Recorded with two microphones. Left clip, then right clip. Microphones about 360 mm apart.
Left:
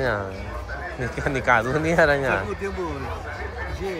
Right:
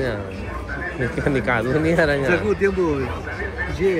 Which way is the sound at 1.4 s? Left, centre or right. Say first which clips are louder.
Left 6 dB; centre.